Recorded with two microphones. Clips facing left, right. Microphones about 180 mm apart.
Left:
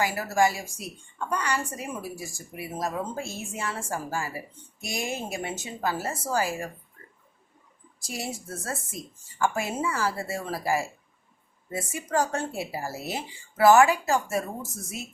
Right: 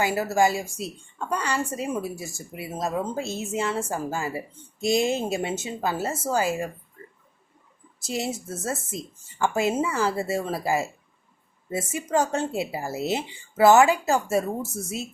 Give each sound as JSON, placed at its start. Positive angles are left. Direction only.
{"t": 0.0, "sound": "a woman's voice", "side_deg": -25}
{"t": 7.9, "sound": "a woman's voice", "side_deg": -25}